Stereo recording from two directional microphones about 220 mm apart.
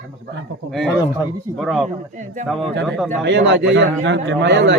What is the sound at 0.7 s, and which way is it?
Speech, centre (ahead or behind).